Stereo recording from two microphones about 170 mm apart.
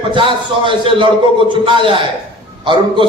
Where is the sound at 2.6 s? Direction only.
30° right (ahead or behind).